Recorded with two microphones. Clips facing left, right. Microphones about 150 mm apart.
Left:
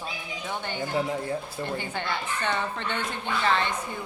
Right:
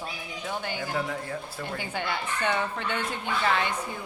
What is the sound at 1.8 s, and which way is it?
Speech, 10° right (ahead or behind).